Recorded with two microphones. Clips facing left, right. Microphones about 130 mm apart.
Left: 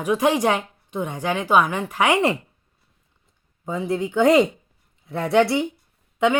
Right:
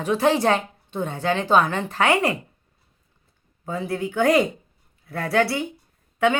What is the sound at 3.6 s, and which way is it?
Speech, 20° left (ahead or behind).